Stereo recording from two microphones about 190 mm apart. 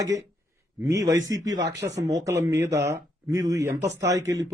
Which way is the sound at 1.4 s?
70° right (ahead or behind).